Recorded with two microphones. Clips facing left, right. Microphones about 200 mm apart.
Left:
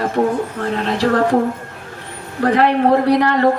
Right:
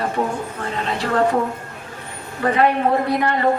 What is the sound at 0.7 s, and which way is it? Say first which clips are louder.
Speech: left 5 dB; 65° left (ahead or behind).